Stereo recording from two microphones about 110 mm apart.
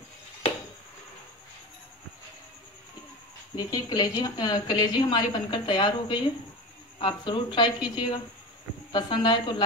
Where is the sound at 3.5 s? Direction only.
40° left (ahead or behind).